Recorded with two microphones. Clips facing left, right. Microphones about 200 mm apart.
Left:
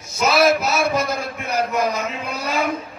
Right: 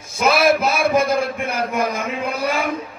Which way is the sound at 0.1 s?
50° right (ahead or behind).